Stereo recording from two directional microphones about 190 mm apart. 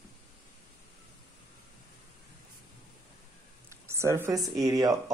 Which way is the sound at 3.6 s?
15° right (ahead or behind).